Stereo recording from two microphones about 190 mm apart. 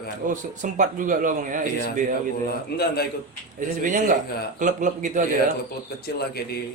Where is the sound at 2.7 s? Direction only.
55° left (ahead or behind).